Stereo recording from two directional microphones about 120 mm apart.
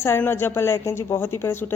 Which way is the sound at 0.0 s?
20° left (ahead or behind).